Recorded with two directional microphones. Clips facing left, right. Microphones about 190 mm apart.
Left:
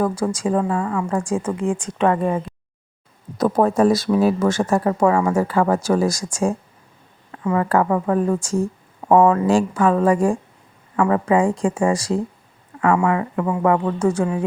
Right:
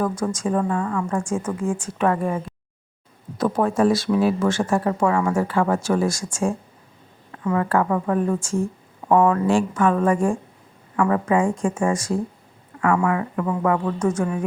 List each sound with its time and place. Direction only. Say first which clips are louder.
0.0 s speech: left 3 dB; 30° left (ahead or behind)
1.6 s a woman's voice: left 3 dB; 15° left (ahead or behind)
3.3 s a woman's voice: left 3 dB; 40° left (ahead or behind)